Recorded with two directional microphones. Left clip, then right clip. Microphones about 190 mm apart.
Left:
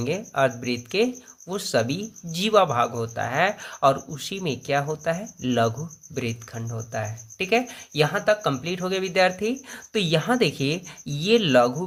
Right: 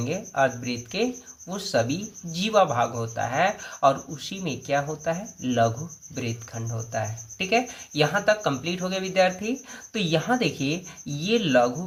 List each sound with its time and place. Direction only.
0.0 s speech: 35° left (ahead or behind)